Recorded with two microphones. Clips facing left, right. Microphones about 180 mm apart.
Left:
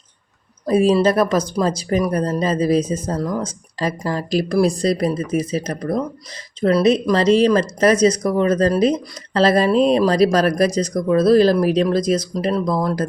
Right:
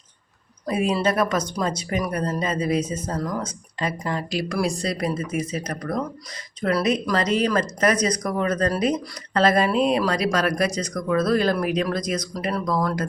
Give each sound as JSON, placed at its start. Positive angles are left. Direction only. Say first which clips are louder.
{"t": 0.6, "sound": "speech", "louder": "left 7 dB", "side_deg": 30}